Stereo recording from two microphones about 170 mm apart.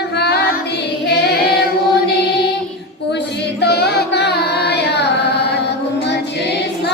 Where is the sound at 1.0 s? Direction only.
70° left (ahead or behind).